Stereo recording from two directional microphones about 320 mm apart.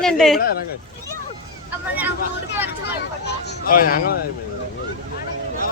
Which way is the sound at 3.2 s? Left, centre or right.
Left.